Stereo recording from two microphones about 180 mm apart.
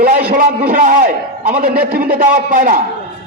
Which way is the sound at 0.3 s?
50° right (ahead or behind).